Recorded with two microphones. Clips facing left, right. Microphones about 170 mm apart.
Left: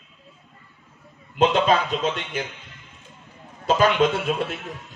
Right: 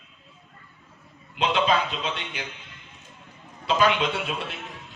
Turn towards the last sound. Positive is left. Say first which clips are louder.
# left 7 dB
turn(degrees=45)  # may be behind; listen again after turning